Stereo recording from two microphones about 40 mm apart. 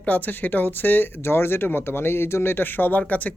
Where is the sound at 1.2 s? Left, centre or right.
Left.